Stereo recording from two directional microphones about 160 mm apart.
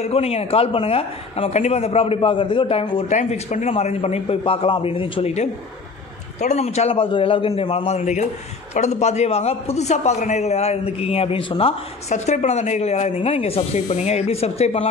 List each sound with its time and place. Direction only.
0.0 s a man's voice: 40° left (ahead or behind)
3.2 s a man's voice: 45° left (ahead or behind)